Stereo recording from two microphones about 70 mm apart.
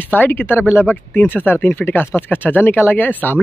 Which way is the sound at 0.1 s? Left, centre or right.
Left.